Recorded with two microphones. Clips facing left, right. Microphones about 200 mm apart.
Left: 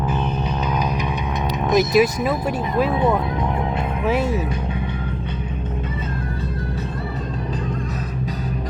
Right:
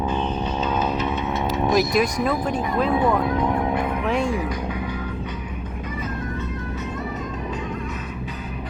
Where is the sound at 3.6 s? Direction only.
25° left (ahead or behind).